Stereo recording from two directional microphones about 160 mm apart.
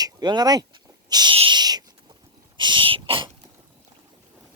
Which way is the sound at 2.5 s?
30° right (ahead or behind).